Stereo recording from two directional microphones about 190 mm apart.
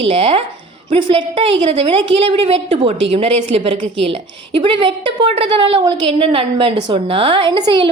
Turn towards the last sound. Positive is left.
turn(degrees=-25)  # may be behind; listen again after turning